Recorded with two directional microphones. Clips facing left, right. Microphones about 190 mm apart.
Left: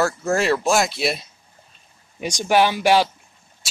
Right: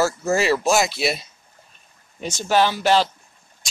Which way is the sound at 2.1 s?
15° left (ahead or behind).